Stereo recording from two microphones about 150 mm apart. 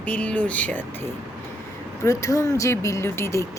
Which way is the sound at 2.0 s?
20° left (ahead or behind).